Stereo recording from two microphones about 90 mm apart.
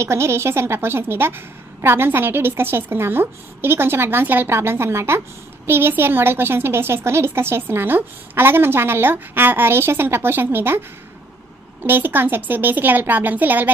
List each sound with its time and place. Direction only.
0.0 s a woman's voice: 30° right (ahead or behind)
11.8 s a woman's voice: 25° right (ahead or behind)